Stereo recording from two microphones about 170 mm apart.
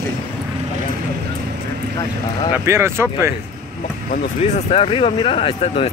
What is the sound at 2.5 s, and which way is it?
Speech, 15° right (ahead or behind).